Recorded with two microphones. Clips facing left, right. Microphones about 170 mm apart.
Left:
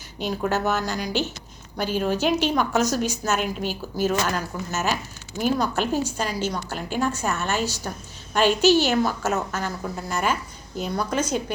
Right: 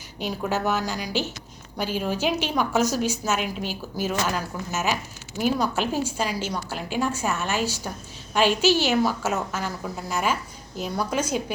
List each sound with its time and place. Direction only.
0.2 s a woman's voice: 10° right (ahead or behind)
3.4 s a woman's voice: 45° left (ahead or behind)
3.9 s a woman's voice: 10° right (ahead or behind)